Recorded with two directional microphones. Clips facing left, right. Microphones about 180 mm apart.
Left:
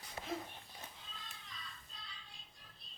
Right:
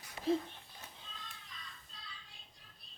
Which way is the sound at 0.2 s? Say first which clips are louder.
Right 12 dB; 20° left (ahead or behind).